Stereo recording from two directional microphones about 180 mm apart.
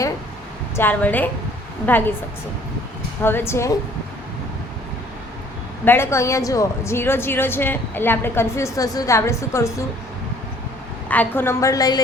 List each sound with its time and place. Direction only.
0.8 s a woman's voice: 10° left (ahead or behind)
3.2 s a woman's voice: 15° left (ahead or behind)
5.8 s a woman's voice: 10° left (ahead or behind)
11.1 s a woman's voice: 10° left (ahead or behind)